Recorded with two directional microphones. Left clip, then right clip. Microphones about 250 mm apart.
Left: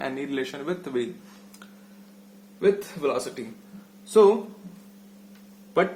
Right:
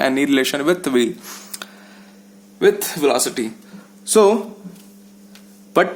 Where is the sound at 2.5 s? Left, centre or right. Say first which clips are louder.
Right 7 dB; right.